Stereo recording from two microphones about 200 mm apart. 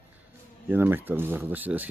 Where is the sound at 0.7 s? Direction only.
10° right (ahead or behind).